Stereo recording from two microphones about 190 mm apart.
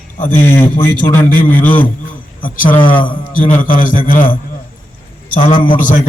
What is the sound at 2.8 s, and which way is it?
Speech, 25° left (ahead or behind).